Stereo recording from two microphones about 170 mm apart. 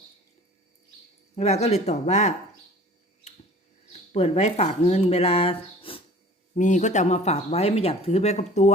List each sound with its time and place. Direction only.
1.4 s speech: 40° left (ahead or behind)
4.1 s speech: 40° left (ahead or behind)
6.5 s speech: 45° left (ahead or behind)